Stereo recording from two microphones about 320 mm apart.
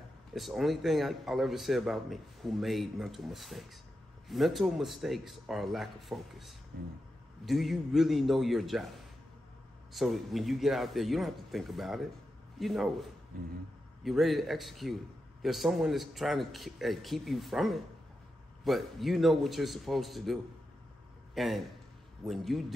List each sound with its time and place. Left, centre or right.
0.3 s a man's voice: centre
6.7 s speech: right
7.4 s a man's voice: centre
9.9 s a man's voice: centre
14.0 s a man's voice: centre
21.4 s a man's voice: centre